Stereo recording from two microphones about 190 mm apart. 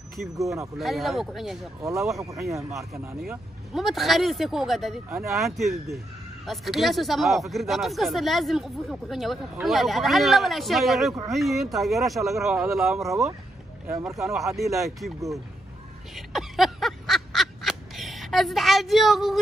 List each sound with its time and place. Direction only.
0.4 s speech: 15° right (ahead or behind)
0.7 s speech: centre (ahead or behind)
1.8 s speech: 15° right (ahead or behind)
3.2 s speech: centre (ahead or behind)
14.2 s speech: centre (ahead or behind)
15.1 s speech: 15° right (ahead or behind)
16.2 s a sound: centre (ahead or behind)